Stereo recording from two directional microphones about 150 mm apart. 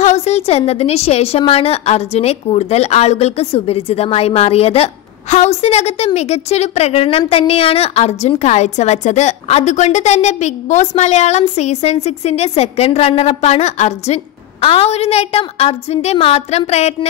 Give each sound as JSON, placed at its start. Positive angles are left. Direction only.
{"t": 0.0, "sound": "a woman's voice", "side_deg": 50}